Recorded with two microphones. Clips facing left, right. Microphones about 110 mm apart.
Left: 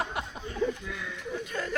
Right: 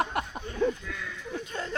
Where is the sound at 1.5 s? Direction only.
30° right (ahead or behind).